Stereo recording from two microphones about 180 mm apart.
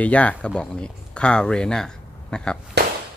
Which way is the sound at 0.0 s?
10° left (ahead or behind).